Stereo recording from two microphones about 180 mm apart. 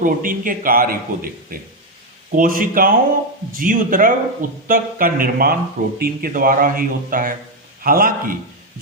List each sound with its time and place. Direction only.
0.0 s a man's voice: 50° right (ahead or behind)